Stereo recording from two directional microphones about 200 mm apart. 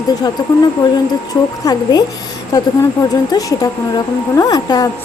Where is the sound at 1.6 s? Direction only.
20° left (ahead or behind).